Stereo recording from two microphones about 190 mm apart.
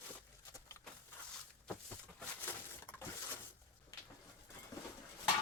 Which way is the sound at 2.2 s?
10° left (ahead or behind).